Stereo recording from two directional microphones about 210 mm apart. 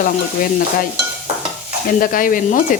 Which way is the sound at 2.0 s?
40° left (ahead or behind).